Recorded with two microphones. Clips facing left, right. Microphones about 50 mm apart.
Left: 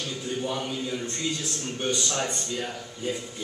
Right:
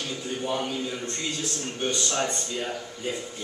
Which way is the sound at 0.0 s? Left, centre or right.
Centre.